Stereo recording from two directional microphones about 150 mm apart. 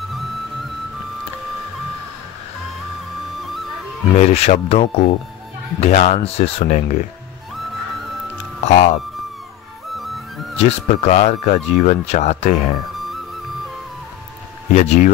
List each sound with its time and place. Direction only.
3.3 s music: centre (ahead or behind)
4.1 s speech: 45° left (ahead or behind)
8.6 s speech: 50° left (ahead or behind)
9.9 s music: centre (ahead or behind)
10.6 s speech: 50° left (ahead or behind)
12.9 s music: centre (ahead or behind)
14.7 s speech: 50° left (ahead or behind)